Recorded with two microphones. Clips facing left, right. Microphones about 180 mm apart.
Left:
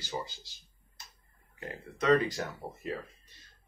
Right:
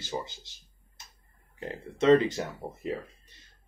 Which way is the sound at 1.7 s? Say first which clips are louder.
Right 5 dB; 25° right (ahead or behind).